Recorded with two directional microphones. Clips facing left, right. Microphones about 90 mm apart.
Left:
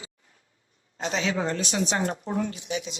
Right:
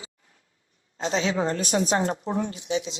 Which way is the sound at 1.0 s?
30° right (ahead or behind).